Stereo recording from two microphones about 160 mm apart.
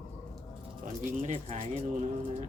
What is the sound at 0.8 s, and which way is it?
Speech, 45° right (ahead or behind).